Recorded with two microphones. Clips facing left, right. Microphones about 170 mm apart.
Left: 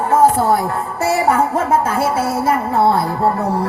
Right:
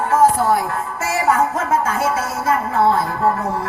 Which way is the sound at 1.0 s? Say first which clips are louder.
Left 3 dB; 30° left (ahead or behind).